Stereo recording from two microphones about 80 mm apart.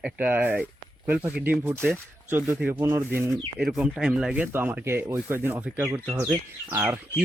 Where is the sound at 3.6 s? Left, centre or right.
Centre.